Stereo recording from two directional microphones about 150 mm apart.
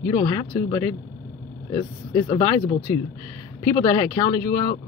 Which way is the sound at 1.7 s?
35° left (ahead or behind).